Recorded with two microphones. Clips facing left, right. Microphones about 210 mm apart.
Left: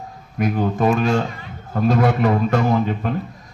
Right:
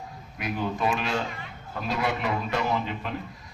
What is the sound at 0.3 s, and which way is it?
A man's voice, 45° left (ahead or behind).